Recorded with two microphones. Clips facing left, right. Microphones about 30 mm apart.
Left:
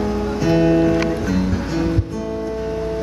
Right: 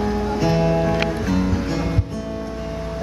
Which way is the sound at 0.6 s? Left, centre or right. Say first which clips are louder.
Left 8 dB; centre.